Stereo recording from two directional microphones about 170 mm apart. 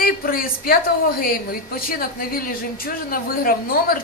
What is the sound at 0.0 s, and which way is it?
A woman's voice, 60° left (ahead or behind).